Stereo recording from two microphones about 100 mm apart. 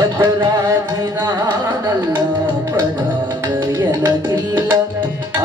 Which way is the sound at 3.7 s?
45° right (ahead or behind).